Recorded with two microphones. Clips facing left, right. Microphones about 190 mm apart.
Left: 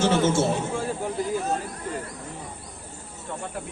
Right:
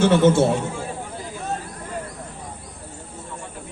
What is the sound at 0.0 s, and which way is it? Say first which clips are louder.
Speech: right 5 dB; 60° right (ahead or behind).